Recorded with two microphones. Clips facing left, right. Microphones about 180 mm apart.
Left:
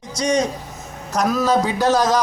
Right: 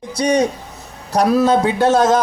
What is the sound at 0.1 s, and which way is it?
Speech, 60° right (ahead or behind).